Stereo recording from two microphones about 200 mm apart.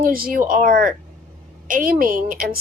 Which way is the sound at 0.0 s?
45° right (ahead or behind).